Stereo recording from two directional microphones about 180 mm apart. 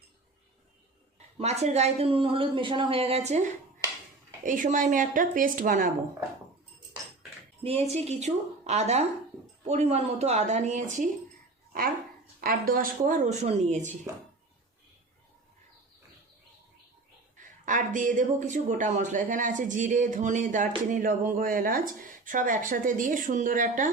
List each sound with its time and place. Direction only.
1.4 s speech: 35° right (ahead or behind)
4.4 s speech: 45° right (ahead or behind)
7.6 s speech: 35° right (ahead or behind)
12.4 s speech: 55° right (ahead or behind)
17.7 s speech: 45° right (ahead or behind)